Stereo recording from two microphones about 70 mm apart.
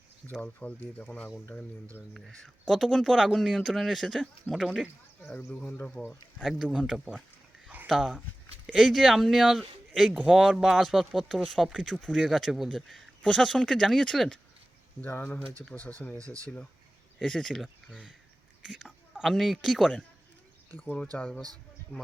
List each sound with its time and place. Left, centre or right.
0.4 s speech: left
2.1 s speech: centre
5.5 s speech: left
6.4 s speech: centre
7.9 s speech: centre
10.2 s speech: centre
13.2 s speech: centre
15.1 s speech: left
16.1 s speech: right
17.2 s speech: centre
18.6 s a sound: centre
19.3 s speech: centre
20.7 s speech: left
20.9 s speech: centre